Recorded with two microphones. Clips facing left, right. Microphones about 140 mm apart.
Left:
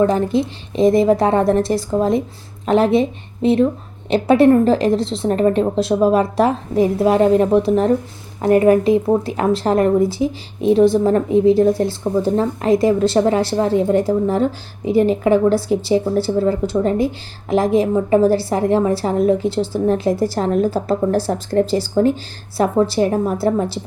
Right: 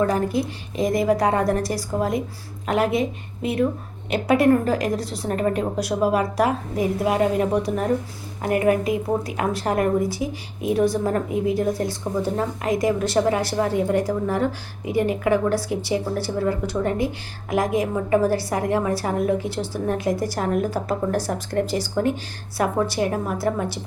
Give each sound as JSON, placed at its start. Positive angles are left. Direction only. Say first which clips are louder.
{"t": 0.0, "sound": "a woman's voice", "louder": "left 5 dB", "side_deg": 25}